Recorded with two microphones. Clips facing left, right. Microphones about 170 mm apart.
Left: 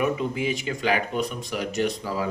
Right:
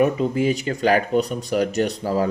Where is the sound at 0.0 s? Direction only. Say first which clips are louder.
Right 6 dB; 40° right (ahead or behind).